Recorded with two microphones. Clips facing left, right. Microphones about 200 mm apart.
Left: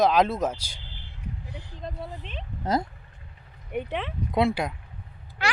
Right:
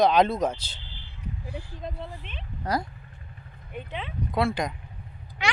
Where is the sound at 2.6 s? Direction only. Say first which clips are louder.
Left 2 dB; 25° left (ahead or behind).